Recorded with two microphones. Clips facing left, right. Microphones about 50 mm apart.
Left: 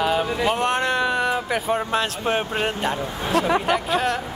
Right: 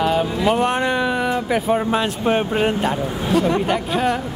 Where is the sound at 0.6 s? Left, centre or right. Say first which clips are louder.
Right 2 dB; centre.